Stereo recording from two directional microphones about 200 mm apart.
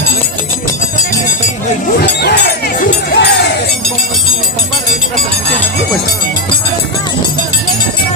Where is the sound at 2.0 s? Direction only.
55° left (ahead or behind).